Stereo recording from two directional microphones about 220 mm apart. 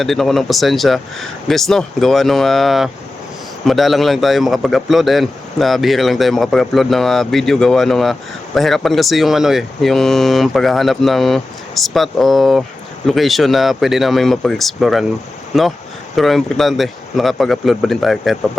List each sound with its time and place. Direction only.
0.0 s a man's voice: centre (ahead or behind)